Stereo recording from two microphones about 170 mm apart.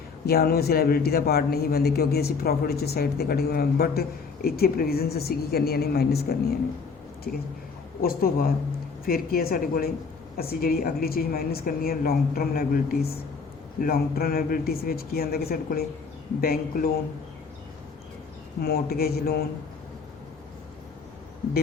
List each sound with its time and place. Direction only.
0.3 s a man's voice: 65° left (ahead or behind)
7.3 s a man's voice: 60° left (ahead or behind)
18.6 s a man's voice: 65° left (ahead or behind)